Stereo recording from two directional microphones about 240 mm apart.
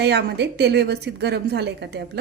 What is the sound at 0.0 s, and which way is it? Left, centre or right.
A woman's voice, right.